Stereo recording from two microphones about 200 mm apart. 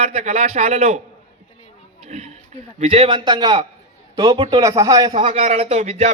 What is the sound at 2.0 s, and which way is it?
Speech, 30° right (ahead or behind).